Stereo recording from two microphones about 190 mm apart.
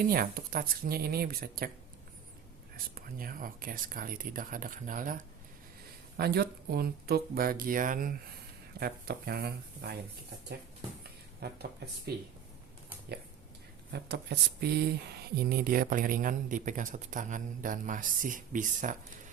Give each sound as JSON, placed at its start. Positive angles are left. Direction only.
{"t": 0.0, "sound": "speech", "side_deg": -50}
{"t": 2.7, "sound": "speech", "side_deg": -50}
{"t": 6.1, "sound": "speech", "side_deg": -55}
{"t": 11.4, "sound": "speech", "side_deg": -55}
{"t": 13.9, "sound": "speech", "side_deg": -60}